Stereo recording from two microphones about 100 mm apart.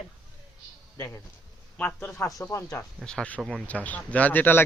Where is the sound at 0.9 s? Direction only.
30° left (ahead or behind).